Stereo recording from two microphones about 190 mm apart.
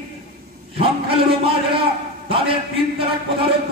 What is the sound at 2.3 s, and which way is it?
Speech, 30° right (ahead or behind).